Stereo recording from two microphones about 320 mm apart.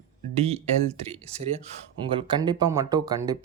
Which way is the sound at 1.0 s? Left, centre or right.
Centre.